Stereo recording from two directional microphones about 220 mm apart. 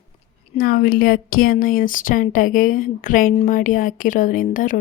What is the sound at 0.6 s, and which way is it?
A woman's voice, 40° left (ahead or behind).